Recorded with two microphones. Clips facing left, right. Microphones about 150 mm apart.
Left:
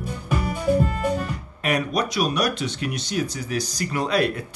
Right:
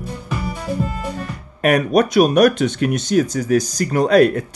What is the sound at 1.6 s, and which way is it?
Speech, 55° right (ahead or behind).